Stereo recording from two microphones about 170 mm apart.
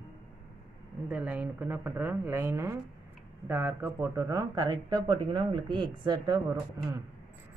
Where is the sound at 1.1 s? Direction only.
10° right (ahead or behind).